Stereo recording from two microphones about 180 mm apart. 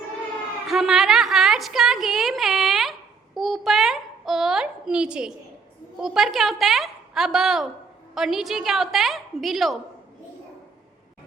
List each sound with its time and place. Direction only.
0.7 s a woman's voice: centre (ahead or behind)